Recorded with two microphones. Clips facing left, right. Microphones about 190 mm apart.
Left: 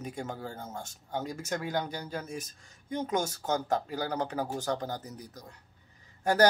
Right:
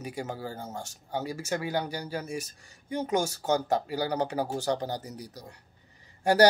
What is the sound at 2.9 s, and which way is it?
Speech, 75° right (ahead or behind).